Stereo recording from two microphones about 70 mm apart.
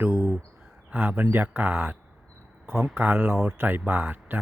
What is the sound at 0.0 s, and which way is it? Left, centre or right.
Bird, right.